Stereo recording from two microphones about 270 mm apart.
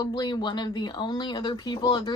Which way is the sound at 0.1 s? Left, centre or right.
Centre.